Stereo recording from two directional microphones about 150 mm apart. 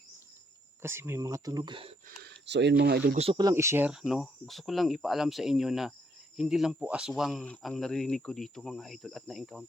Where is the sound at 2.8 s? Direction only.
90° right.